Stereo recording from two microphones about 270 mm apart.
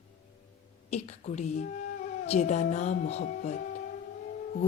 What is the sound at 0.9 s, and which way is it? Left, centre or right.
Speech, left.